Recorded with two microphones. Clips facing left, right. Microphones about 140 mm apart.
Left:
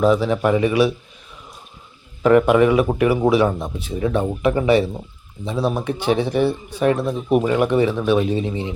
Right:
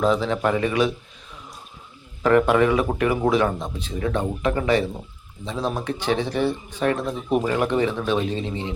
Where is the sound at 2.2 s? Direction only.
15° left (ahead or behind).